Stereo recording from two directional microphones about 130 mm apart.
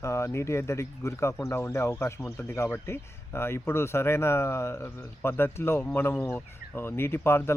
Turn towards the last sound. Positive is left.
turn(degrees=20)  # may be behind; listen again after turning